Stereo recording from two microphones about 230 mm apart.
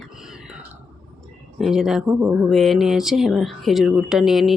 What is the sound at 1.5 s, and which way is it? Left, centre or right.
Speech, centre.